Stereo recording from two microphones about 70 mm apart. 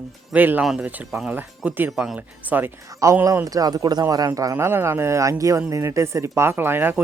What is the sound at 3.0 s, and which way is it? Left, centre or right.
Speech, right.